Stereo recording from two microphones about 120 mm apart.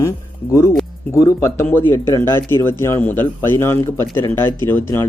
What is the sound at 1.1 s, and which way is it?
Speech, 25° left (ahead or behind).